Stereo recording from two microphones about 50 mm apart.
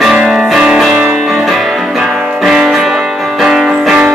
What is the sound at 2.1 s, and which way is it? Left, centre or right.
Music, centre.